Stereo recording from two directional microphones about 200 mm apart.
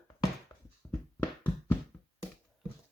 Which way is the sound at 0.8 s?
20° left (ahead or behind).